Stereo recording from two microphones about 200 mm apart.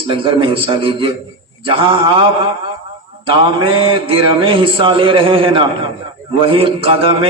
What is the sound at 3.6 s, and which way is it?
A man's voice, 25° right (ahead or behind).